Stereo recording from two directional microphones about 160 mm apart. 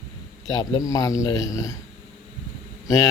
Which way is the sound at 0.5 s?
25° left (ahead or behind).